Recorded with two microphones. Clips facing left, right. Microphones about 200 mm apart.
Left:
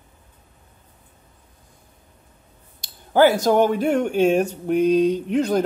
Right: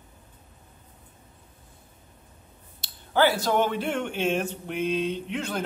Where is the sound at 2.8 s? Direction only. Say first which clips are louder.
Left 7 dB; 45° left (ahead or behind).